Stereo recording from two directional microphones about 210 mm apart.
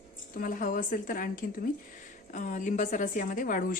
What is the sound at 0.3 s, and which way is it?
A woman's voice, 40° left (ahead or behind).